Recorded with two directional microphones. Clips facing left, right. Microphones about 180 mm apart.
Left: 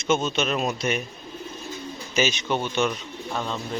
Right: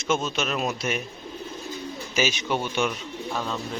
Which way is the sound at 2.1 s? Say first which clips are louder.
Left 1 dB; 5° right (ahead or behind).